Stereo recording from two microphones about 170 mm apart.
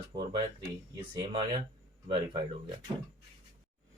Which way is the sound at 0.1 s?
30° right (ahead or behind).